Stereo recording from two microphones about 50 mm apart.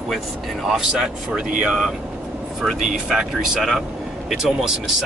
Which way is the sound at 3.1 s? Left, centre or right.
Centre.